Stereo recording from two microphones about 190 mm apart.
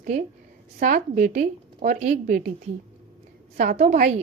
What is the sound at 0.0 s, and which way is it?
A woman's voice, 40° right (ahead or behind).